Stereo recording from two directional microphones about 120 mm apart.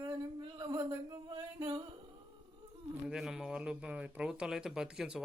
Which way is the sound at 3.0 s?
5° right (ahead or behind).